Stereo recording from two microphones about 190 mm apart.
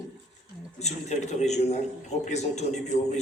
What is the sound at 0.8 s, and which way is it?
A man's voice, 35° left (ahead or behind).